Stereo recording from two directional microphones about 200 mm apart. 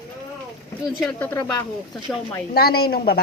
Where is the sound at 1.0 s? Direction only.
Centre (ahead or behind).